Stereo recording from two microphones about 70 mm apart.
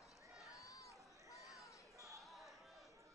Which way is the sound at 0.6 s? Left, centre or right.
Left.